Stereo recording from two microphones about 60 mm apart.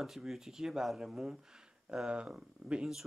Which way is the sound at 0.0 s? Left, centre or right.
Centre.